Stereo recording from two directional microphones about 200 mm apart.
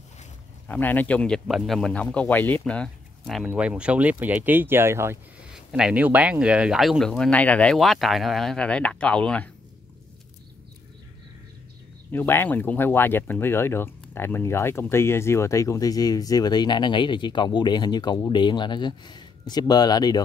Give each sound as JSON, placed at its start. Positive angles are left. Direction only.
{"t": 0.7, "sound": "speech", "side_deg": 10}
{"t": 12.1, "sound": "speech", "side_deg": 10}